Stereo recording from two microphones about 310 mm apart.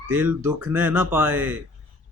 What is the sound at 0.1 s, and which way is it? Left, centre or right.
Speech, centre.